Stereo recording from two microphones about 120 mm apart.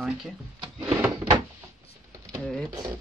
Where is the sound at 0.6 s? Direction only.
40° right (ahead or behind).